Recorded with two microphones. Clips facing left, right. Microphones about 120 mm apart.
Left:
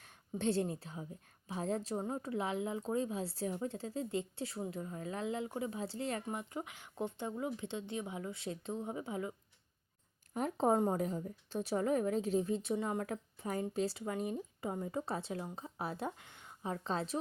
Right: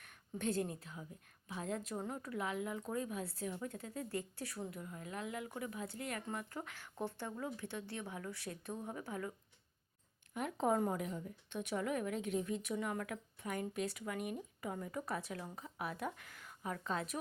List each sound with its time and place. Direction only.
0.0 s a woman's voice: 30° left (ahead or behind)
10.3 s a woman's voice: 35° left (ahead or behind)